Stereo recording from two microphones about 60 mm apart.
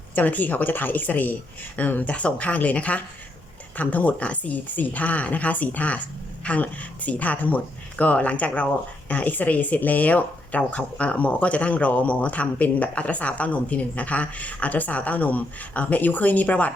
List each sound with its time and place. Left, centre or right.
0.2 s speech: left